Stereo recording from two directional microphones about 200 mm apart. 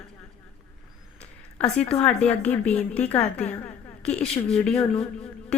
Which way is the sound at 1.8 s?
30° left (ahead or behind).